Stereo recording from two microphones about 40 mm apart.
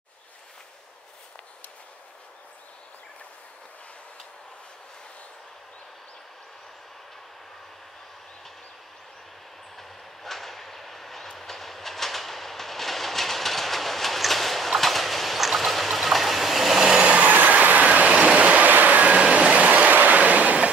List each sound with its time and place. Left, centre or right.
9.8 s vehicle: centre
17.0 s vehicle: right
17.3 s train: right
18.0 s vehicle: right
18.6 s vehicle: right
19.5 s a sound: right